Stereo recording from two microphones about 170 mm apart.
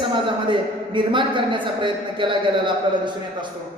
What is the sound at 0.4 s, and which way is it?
A man's voice, 30° right (ahead or behind).